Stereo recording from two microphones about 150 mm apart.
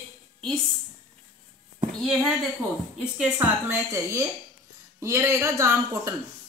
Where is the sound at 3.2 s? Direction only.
10° right (ahead or behind).